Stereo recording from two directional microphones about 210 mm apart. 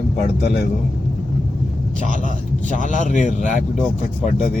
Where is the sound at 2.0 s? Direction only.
35° left (ahead or behind).